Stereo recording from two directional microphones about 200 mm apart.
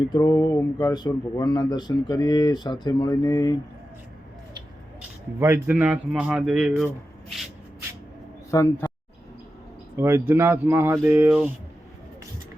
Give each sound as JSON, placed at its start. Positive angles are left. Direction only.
{"t": 0.1, "sound": "speech", "side_deg": 15}
{"t": 5.4, "sound": "a man's voice", "side_deg": -10}
{"t": 8.4, "sound": "speech", "side_deg": 15}
{"t": 10.0, "sound": "speech", "side_deg": -10}